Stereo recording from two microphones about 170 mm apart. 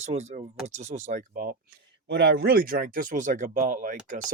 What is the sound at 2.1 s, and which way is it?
Speech, 70° right (ahead or behind).